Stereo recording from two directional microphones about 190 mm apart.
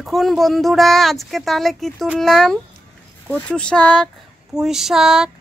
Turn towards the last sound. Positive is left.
turn(degrees=0)  # may be behind; listen again after turning